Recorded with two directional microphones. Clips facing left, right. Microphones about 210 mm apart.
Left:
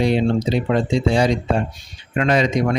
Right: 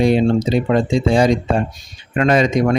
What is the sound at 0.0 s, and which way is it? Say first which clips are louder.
A man's voice: right 3 dB; 45° right (ahead or behind).